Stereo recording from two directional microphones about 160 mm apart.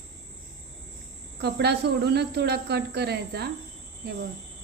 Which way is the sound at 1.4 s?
90° right.